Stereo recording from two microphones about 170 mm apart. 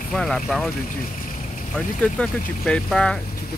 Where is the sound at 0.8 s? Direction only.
50° left (ahead or behind).